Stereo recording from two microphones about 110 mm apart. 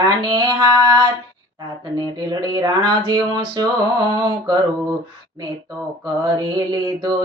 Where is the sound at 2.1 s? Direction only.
35° right (ahead or behind).